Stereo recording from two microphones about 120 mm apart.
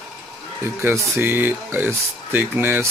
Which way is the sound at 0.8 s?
20° right (ahead or behind).